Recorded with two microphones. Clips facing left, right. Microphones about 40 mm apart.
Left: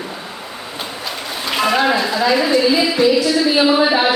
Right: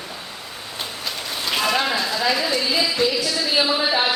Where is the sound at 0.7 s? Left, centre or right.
Centre.